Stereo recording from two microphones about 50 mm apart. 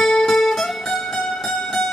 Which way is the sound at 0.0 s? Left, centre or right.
Centre.